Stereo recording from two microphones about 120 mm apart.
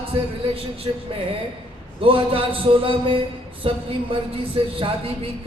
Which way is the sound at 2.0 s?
50° right (ahead or behind).